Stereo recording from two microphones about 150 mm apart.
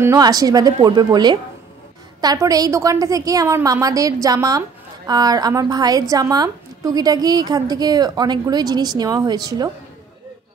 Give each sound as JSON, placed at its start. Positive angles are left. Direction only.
{"t": 0.0, "sound": "a woman's voice", "side_deg": -25}